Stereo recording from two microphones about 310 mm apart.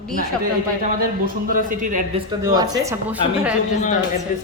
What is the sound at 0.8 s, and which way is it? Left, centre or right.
A man's voice, right.